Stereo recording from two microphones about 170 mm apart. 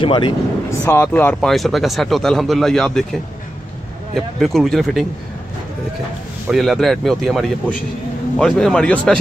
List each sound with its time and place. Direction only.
0.0 s speech: 30° left (ahead or behind)
0.7 s speech: 15° left (ahead or behind)
6.5 s speech: centre (ahead or behind)